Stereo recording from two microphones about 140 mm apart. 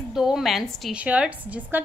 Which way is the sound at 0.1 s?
5° right (ahead or behind).